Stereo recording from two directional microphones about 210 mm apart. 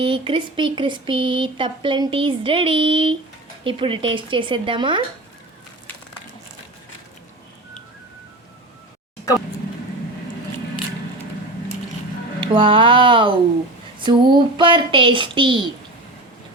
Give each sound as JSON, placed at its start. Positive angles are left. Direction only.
{"t": 0.0, "sound": "speech", "side_deg": -25}
{"t": 12.4, "sound": "speech", "side_deg": -25}